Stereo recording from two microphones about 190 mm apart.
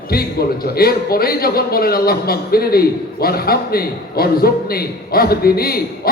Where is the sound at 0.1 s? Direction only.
55° left (ahead or behind).